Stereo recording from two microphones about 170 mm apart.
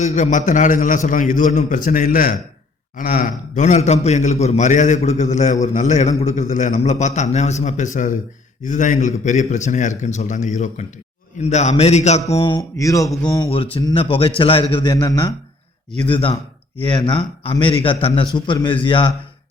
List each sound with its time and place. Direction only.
0.0 s a man's voice: 45° left (ahead or behind)